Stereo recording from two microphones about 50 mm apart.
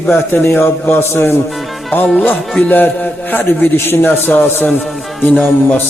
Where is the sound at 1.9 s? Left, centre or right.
Left.